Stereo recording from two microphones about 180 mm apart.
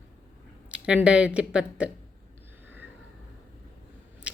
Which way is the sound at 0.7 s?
5° right (ahead or behind).